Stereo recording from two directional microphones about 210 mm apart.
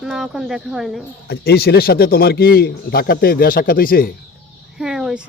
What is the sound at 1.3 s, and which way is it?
Speech, 50° left (ahead or behind).